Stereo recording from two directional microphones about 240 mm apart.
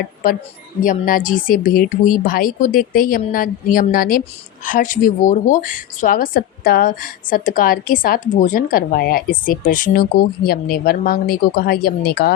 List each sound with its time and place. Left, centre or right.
0.2 s a woman's voice: left